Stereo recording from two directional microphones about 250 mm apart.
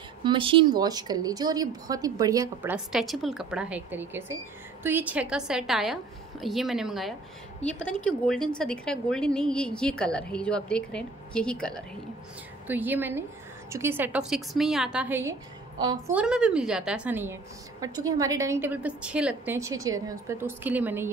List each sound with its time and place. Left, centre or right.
0.2 s a woman's voice: centre
12.6 s a woman's voice: centre
16.2 s a woman's voice: centre